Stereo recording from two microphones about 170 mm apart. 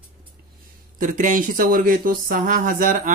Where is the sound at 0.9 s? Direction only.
50° right (ahead or behind).